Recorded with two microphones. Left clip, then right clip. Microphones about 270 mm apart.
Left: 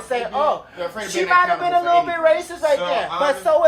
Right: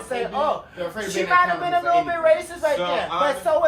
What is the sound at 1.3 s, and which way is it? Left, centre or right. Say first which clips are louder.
Speech: left 3 dB; left.